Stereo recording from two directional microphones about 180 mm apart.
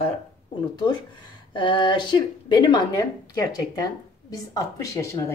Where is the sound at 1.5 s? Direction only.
25° left (ahead or behind).